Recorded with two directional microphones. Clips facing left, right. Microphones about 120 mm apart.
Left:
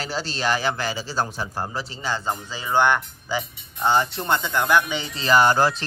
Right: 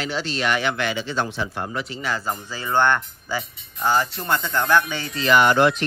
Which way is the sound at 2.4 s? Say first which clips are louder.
Even; 15° left (ahead or behind).